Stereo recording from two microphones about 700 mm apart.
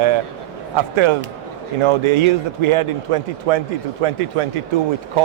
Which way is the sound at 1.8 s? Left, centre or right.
Right.